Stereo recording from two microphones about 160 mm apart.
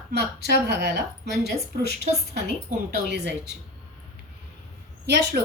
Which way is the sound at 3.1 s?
90° right.